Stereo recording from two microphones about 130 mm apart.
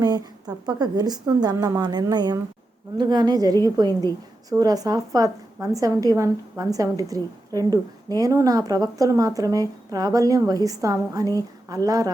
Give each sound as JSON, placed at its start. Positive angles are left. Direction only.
{"t": 0.0, "sound": "a woman's voice", "side_deg": -30}